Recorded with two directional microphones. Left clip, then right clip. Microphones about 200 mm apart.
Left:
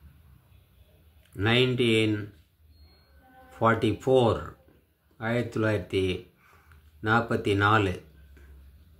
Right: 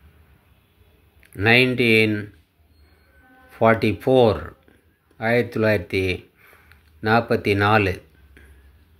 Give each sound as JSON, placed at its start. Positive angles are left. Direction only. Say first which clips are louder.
{"t": 1.3, "sound": "speech", "louder": "right 8 dB", "side_deg": -20}
{"t": 3.5, "sound": "speech", "louder": "right 7 dB", "side_deg": -20}